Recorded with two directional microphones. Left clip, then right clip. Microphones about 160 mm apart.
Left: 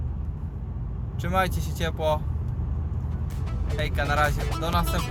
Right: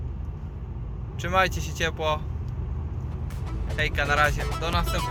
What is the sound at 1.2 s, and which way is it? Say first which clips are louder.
Speech: right 2 dB; 5° left (ahead or behind).